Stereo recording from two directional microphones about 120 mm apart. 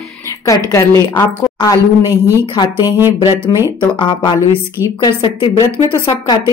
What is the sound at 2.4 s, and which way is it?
Speech, 40° left (ahead or behind).